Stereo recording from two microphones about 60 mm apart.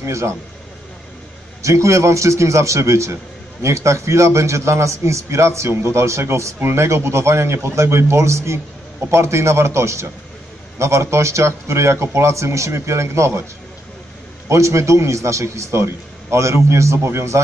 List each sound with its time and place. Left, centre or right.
0.0 s a man's voice: right
1.6 s a man's voice: right
14.5 s a man's voice: right